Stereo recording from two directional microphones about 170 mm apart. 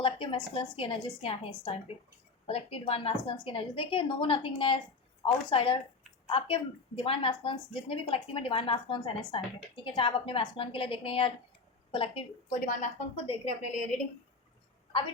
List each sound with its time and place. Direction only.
0.0 s a woman's voice: 30° left (ahead or behind)
12.5 s a woman's voice: 50° left (ahead or behind)